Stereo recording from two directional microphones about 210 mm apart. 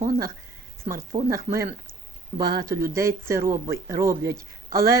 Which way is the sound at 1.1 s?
15° right (ahead or behind).